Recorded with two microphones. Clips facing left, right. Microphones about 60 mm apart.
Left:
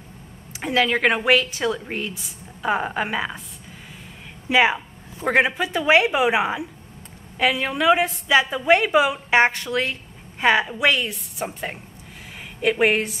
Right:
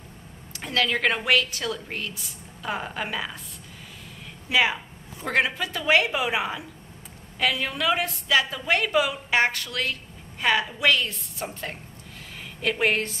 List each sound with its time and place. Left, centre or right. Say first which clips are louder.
0.5 s a woman's voice: left 5 dB; centre
4.5 s a woman's voice: left 5 dB; left